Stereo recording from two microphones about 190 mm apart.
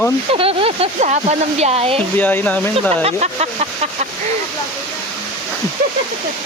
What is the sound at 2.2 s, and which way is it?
Speech, 10° left (ahead or behind).